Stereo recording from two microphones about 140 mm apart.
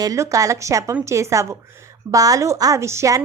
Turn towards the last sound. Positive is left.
turn(degrees=-20)  # may be behind; listen again after turning